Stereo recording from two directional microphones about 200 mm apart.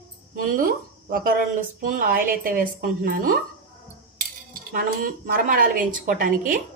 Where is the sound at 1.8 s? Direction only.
45° right (ahead or behind).